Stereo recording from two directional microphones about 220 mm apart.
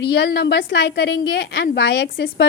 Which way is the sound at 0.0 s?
50° left (ahead or behind).